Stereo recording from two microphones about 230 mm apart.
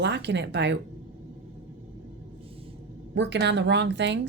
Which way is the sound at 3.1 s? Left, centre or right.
Right.